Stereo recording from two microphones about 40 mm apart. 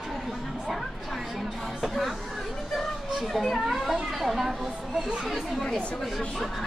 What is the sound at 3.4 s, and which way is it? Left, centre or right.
Speech, centre.